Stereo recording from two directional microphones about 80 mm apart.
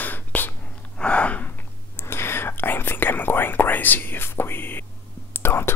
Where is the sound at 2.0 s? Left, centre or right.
Left.